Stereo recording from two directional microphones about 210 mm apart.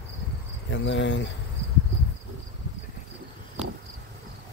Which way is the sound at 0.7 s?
60° left (ahead or behind).